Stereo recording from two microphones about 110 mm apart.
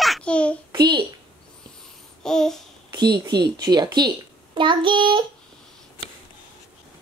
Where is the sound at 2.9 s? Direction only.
40° right (ahead or behind).